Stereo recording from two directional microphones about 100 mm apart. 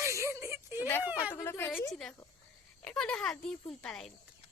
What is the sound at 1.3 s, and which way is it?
Speech, 25° left (ahead or behind).